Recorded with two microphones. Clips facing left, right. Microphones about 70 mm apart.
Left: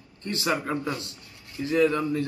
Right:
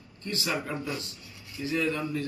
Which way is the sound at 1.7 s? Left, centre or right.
Left.